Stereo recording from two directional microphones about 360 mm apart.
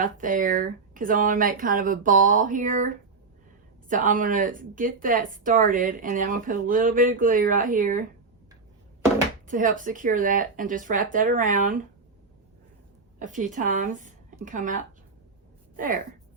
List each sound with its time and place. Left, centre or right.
0.0 s speech: right
9.5 s speech: right
13.1 s a woman's voice: right